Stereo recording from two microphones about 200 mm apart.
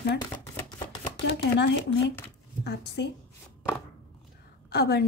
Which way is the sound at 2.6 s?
55° left (ahead or behind).